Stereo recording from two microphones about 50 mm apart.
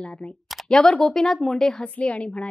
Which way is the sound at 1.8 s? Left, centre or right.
Left.